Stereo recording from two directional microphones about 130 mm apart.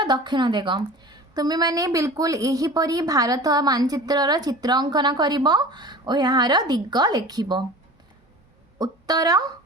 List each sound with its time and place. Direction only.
0.0 s a woman's voice: 35° right (ahead or behind)
8.8 s speech: 30° right (ahead or behind)